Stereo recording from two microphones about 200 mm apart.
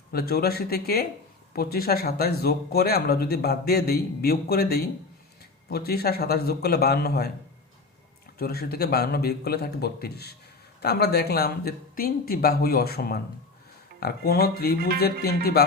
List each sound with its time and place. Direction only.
0.1 s speech: 50° left (ahead or behind)
8.4 s speech: 50° left (ahead or behind)